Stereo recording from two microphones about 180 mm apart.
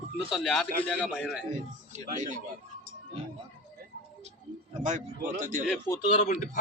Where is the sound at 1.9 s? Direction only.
40° right (ahead or behind).